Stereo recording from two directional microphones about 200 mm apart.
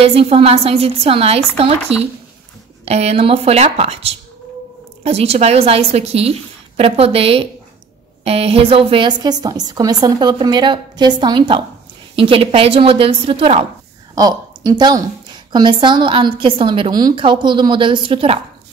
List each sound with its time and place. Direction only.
0.0 s a woman's voice: 30° right (ahead or behind)
14.1 s a woman's voice: 20° right (ahead or behind)